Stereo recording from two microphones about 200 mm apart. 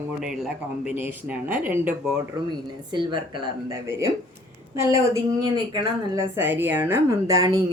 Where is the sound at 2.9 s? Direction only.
25° right (ahead or behind).